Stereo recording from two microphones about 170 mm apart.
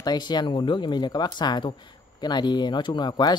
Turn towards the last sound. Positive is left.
turn(degrees=25)  # may be behind; listen again after turning